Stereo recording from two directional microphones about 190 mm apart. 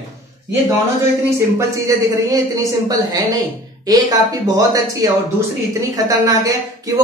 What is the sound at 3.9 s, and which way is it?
Speech, 20° right (ahead or behind).